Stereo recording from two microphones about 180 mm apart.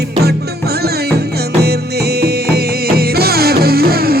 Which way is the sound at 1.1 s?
60° right (ahead or behind).